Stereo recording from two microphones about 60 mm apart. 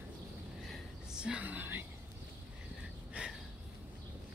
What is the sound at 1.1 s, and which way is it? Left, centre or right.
Speech, centre.